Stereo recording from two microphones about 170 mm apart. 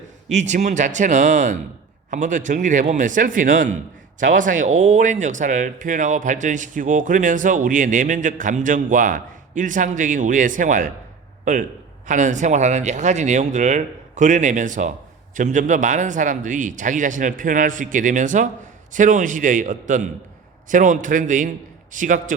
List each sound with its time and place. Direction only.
0.3 s speech: 45° right (ahead or behind)
12.0 s speech: 45° right (ahead or behind)